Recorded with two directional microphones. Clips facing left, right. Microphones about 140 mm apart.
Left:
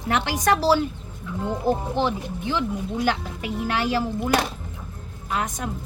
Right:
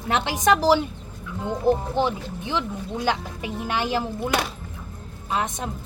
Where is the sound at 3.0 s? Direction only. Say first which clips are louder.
Right 2 dB; 20° right (ahead or behind).